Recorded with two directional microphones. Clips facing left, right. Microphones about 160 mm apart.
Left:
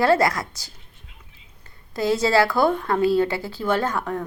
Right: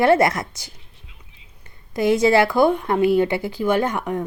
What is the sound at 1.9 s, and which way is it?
Speech, 20° right (ahead or behind).